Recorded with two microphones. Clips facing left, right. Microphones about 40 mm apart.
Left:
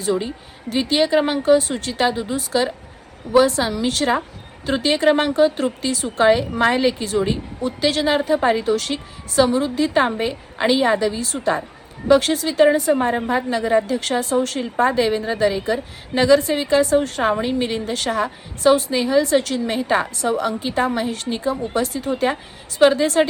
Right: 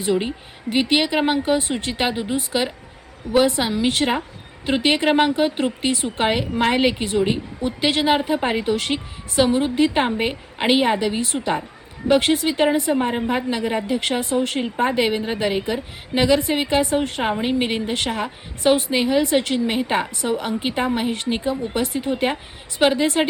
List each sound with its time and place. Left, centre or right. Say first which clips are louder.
0.0 s a woman's voice: even; right